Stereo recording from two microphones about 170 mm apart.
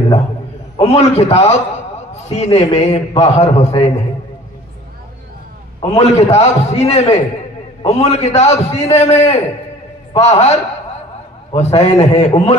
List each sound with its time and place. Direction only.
0.7 s a man's voice: 40° left (ahead or behind)
5.9 s a man's voice: 40° left (ahead or behind)